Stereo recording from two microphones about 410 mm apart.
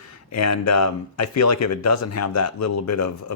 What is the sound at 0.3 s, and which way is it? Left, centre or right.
A man's voice, left.